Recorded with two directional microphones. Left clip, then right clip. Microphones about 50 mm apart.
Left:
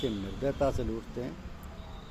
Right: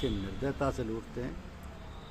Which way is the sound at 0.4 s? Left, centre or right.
Right.